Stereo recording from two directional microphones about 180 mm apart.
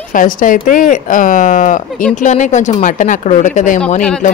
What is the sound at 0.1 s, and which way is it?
Speech, 50° left (ahead or behind).